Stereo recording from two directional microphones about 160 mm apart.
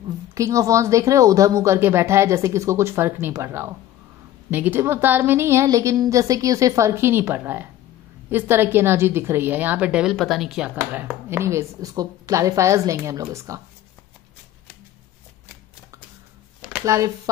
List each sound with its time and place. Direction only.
0.3 s a woman's voice: 20° right (ahead or behind); by 10.7 s centre (ahead or behind)
10.9 s a woman's voice: 10° right (ahead or behind)
16.8 s a woman's voice: 20° right (ahead or behind)